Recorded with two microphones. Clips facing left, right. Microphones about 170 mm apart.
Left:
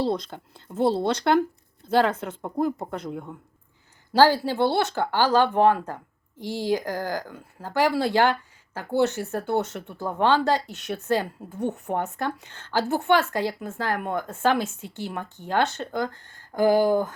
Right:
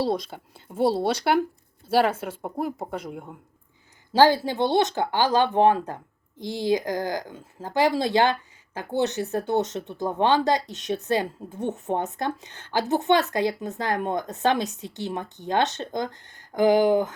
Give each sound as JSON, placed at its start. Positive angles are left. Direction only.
{"t": 0.0, "sound": "a woman's voice", "side_deg": -10}